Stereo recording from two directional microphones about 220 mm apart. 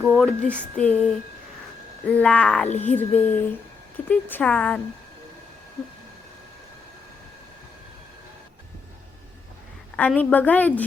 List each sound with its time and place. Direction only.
0.0 s speech: centre (ahead or behind)
2.0 s a woman's voice: 5° left (ahead or behind)
9.9 s a woman's voice: 5° left (ahead or behind)